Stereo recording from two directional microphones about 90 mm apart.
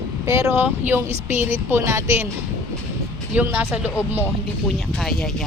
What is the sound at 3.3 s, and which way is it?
Speech, 20° right (ahead or behind).